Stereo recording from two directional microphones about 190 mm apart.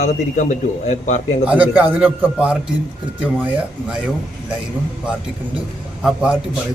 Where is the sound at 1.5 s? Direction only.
10° right (ahead or behind).